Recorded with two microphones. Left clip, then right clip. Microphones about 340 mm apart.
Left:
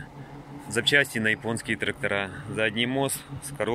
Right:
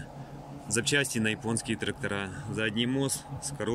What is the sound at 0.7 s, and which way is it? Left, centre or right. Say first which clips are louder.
Speech: left 6 dB; centre.